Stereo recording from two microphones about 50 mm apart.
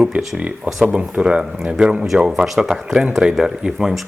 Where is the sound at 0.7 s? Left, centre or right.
Right.